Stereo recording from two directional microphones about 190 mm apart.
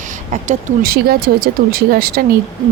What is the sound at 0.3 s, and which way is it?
A woman's voice, 45° right (ahead or behind).